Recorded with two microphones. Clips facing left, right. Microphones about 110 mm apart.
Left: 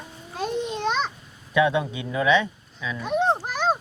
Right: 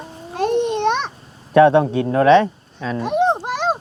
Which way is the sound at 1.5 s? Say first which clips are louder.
Right 10 dB; 55° right (ahead or behind).